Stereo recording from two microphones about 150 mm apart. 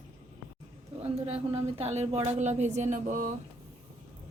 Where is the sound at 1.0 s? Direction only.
40° right (ahead or behind); by 3.3 s 60° right (ahead or behind).